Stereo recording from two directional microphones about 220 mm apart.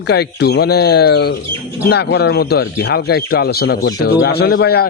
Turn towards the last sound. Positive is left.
turn(degrees=45)  # may be behind; listen again after turning